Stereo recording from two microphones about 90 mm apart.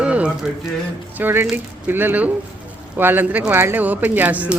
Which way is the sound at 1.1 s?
25° right (ahead or behind).